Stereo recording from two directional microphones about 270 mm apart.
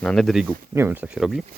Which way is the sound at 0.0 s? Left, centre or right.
Centre.